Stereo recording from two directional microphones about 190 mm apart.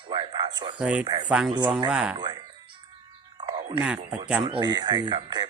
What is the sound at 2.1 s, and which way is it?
Speech, 25° right (ahead or behind).